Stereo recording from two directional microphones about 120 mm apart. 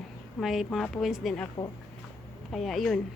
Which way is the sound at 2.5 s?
Centre (ahead or behind).